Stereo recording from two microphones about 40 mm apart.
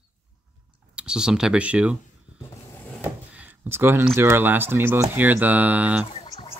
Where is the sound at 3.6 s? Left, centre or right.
Right.